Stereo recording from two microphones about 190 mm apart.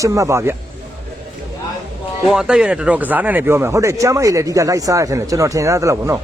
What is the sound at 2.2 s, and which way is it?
Speech, 5° right (ahead or behind).